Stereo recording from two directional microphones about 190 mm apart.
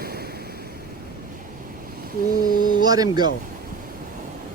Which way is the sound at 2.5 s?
50° left (ahead or behind).